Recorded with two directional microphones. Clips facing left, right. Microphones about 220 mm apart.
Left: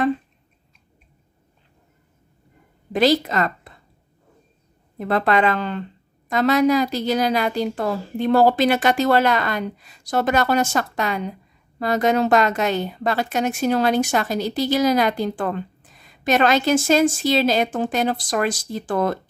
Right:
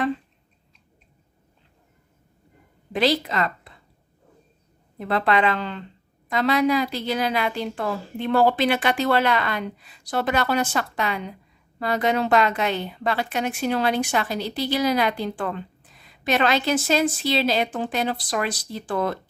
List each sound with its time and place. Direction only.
2.9 s a woman's voice: 45° left (ahead or behind)
4.9 s a woman's voice: 45° left (ahead or behind)